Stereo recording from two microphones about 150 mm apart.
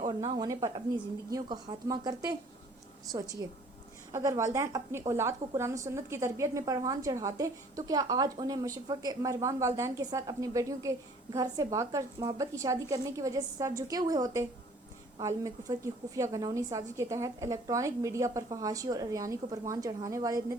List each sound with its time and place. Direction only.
0.3 s a woman's voice: 30° right (ahead or behind)
3.4 s a woman's voice: 25° right (ahead or behind)